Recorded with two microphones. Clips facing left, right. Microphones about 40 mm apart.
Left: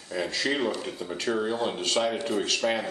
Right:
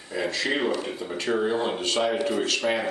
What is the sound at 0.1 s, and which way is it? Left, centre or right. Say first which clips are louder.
Speech: right 2 dB; centre.